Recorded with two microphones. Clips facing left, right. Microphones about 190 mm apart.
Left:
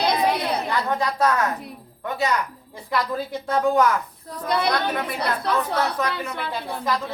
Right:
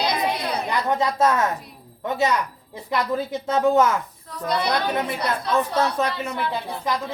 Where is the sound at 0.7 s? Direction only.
20° right (ahead or behind).